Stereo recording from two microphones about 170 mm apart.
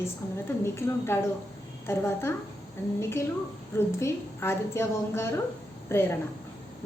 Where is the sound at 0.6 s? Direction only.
15° left (ahead or behind).